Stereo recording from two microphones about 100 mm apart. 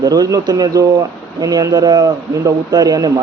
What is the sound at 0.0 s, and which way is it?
Speech, 40° right (ahead or behind).